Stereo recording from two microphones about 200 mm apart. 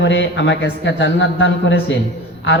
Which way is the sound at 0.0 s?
65° left (ahead or behind).